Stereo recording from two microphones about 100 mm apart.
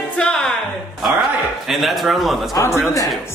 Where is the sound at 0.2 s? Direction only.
5° left (ahead or behind).